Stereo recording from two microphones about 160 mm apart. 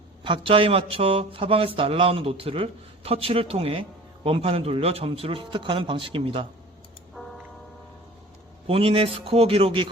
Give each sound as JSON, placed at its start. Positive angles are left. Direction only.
{"t": 0.3, "sound": "speech", "side_deg": -35}
{"t": 7.2, "sound": "tick-tock", "side_deg": 5}
{"t": 8.6, "sound": "speech", "side_deg": -35}